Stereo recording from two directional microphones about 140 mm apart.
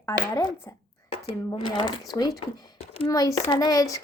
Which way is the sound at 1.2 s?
40° left (ahead or behind).